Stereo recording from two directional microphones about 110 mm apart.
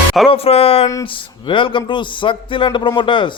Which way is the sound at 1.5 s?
50° left (ahead or behind).